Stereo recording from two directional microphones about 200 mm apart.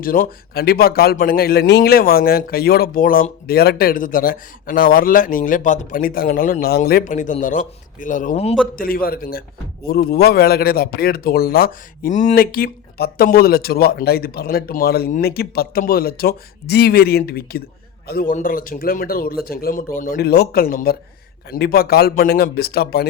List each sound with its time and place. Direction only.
0.0 s a man's voice: 45° left (ahead or behind)
8.8 s a man's voice: 45° left (ahead or behind)